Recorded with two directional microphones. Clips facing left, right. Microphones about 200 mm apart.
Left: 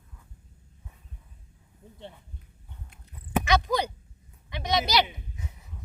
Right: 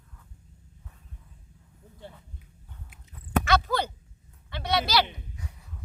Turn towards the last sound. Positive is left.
turn(degrees=20)  # may be behind; listen again after turning